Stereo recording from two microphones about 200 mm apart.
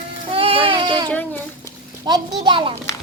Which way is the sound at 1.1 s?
10° left (ahead or behind).